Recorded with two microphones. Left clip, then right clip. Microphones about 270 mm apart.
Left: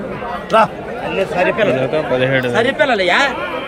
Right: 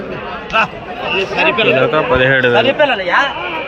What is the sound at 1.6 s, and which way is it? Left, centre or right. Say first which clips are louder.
Speech: right 3 dB; centre.